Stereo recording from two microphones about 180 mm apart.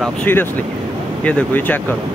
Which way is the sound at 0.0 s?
10° left (ahead or behind).